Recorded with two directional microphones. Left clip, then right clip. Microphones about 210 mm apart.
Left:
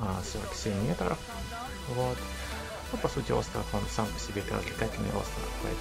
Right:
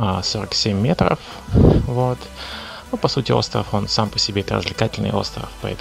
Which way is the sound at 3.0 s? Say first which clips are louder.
Right 12 dB; 40° right (ahead or behind).